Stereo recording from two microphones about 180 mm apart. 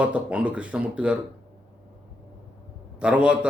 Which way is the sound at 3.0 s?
5° right (ahead or behind).